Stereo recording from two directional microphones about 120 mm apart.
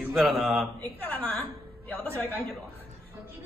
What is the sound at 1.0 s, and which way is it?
Speech, 10° left (ahead or behind).